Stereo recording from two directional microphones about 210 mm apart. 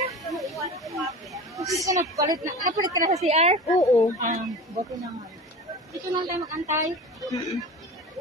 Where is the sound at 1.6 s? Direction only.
15° right (ahead or behind).